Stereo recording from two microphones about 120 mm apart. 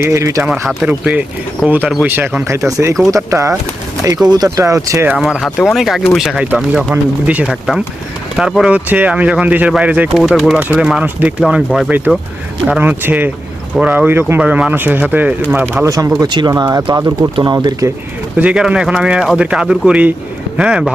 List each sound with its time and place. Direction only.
0.1 s speech: 25° right (ahead or behind)
0.7 s speech: 10° right (ahead or behind)
2.6 s speech: 25° right (ahead or behind)
5.0 s speech: 5° right (ahead or behind)
10.2 s speech: centre (ahead or behind); by 15.9 s 15° right (ahead or behind)
15.9 s speech: 30° right (ahead or behind)
16.2 s speech: 40° right (ahead or behind)
18.3 s speech: 10° right (ahead or behind)